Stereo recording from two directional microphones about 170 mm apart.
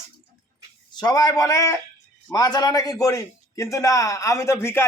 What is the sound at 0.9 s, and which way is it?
A child's voice, 25° left (ahead or behind).